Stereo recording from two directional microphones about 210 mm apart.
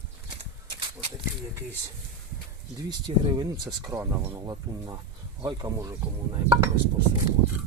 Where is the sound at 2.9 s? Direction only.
20° right (ahead or behind).